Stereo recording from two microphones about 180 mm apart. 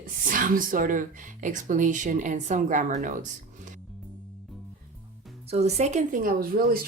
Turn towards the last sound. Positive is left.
turn(degrees=-55)  # may be behind; listen again after turning